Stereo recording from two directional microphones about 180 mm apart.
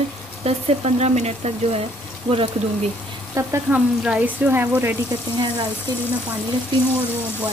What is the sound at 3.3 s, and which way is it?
Speech, 15° right (ahead or behind).